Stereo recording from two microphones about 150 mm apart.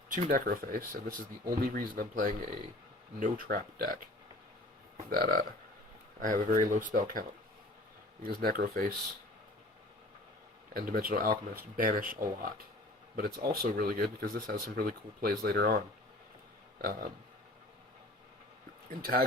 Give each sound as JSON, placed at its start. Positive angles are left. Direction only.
{"t": 0.3, "sound": "speech", "side_deg": -70}
{"t": 6.1, "sound": "speech", "side_deg": -65}
{"t": 8.2, "sound": "speech", "side_deg": -85}
{"t": 10.8, "sound": "speech", "side_deg": -85}
{"t": 13.1, "sound": "speech", "side_deg": -90}